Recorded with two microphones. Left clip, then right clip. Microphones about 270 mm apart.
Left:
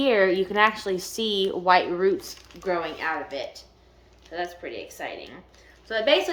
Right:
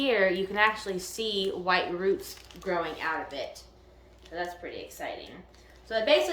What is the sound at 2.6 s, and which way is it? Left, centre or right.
Speech, centre.